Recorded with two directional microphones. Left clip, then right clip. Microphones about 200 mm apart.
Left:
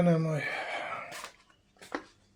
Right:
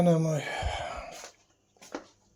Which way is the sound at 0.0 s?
10° right (ahead or behind).